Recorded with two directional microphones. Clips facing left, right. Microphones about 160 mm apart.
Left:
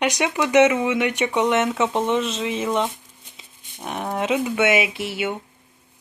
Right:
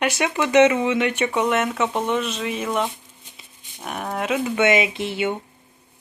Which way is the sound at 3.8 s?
25° left (ahead or behind).